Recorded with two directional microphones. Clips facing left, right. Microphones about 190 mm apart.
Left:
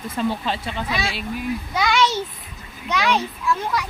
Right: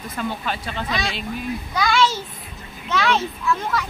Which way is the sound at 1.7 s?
20° left (ahead or behind).